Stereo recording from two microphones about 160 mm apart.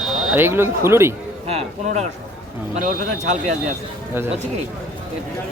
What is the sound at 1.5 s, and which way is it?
Speech, 40° right (ahead or behind).